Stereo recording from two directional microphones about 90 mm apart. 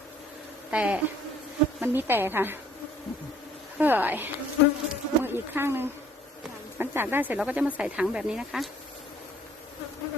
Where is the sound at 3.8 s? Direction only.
20° right (ahead or behind).